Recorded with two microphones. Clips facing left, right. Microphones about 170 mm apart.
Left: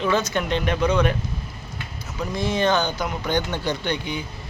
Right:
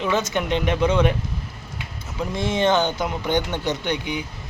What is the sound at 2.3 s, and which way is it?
Speech, 25° right (ahead or behind).